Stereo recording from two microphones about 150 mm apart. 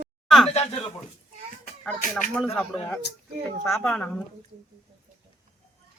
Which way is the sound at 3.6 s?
5° left (ahead or behind).